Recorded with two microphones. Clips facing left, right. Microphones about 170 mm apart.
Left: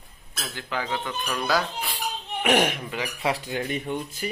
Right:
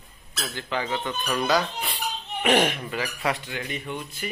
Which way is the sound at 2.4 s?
10° left (ahead or behind).